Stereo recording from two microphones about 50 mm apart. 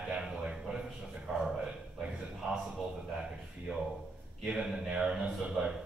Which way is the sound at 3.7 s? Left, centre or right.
Centre.